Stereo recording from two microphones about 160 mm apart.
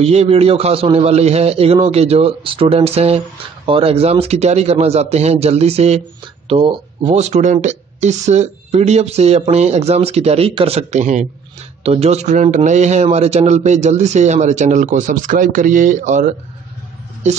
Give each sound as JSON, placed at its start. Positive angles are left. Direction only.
{"t": 0.0, "sound": "a man's voice", "side_deg": -40}
{"t": 7.1, "sound": "a man's voice", "side_deg": -45}